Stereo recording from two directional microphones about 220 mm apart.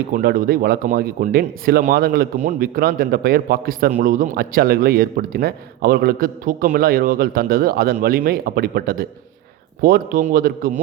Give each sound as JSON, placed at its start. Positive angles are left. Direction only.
{"t": 0.1, "sound": "a man's voice", "side_deg": -40}